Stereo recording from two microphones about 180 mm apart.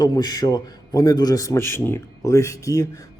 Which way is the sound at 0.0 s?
20° left (ahead or behind).